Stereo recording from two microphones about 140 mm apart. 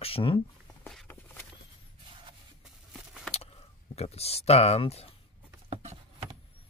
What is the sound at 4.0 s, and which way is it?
Speech, 45° left (ahead or behind).